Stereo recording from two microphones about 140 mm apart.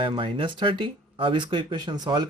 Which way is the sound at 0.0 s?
35° right (ahead or behind).